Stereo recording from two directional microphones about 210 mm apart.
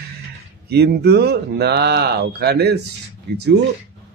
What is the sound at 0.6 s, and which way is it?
Speech, 50° right (ahead or behind).